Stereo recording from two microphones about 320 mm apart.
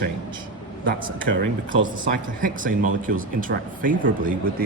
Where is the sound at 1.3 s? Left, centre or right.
Right.